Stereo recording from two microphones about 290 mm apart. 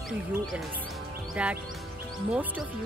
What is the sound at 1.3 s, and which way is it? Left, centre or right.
Music, centre.